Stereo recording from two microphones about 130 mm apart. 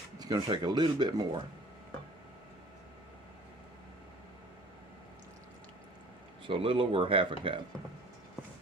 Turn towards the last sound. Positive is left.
turn(degrees=-40)  # may be behind; listen again after turning